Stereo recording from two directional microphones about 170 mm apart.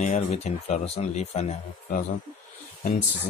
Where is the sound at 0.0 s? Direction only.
45° left (ahead or behind).